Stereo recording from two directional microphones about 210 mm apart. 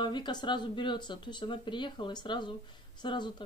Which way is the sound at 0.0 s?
20° left (ahead or behind).